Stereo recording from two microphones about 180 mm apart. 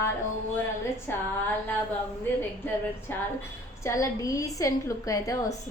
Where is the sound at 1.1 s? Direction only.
10° left (ahead or behind).